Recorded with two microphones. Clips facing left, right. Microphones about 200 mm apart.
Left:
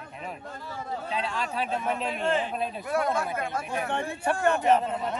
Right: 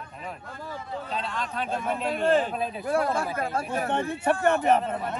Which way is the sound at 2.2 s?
40° right (ahead or behind).